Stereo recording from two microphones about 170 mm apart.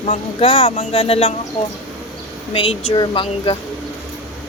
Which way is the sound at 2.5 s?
30° left (ahead or behind).